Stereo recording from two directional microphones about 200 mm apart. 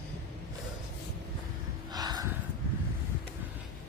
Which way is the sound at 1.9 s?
20° right (ahead or behind).